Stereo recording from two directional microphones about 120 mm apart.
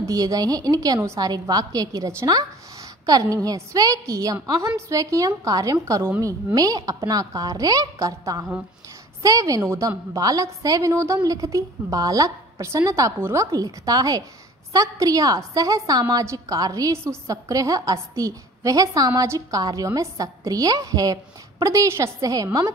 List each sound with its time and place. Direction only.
0.0 s a woman's voice: 30° right (ahead or behind)